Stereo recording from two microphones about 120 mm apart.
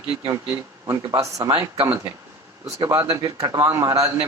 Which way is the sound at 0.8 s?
30° right (ahead or behind).